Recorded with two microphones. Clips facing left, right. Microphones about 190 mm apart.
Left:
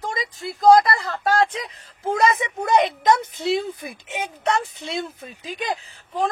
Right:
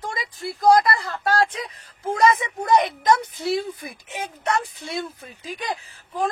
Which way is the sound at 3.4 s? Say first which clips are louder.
Left 2 dB; 25° left (ahead or behind).